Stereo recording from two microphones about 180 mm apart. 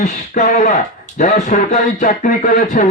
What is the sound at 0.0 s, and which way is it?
Speech, 45° left (ahead or behind).